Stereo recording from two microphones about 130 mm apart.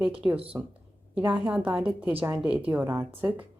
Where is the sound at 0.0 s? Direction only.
10° right (ahead or behind).